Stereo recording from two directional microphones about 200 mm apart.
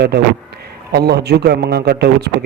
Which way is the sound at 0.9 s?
55° right (ahead or behind).